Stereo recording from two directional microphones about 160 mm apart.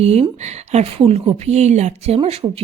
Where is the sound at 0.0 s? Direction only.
40° right (ahead or behind).